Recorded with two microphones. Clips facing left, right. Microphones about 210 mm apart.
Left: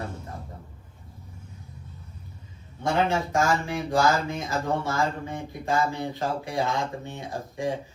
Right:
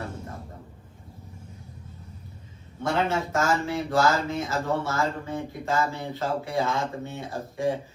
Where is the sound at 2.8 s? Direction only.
15° left (ahead or behind).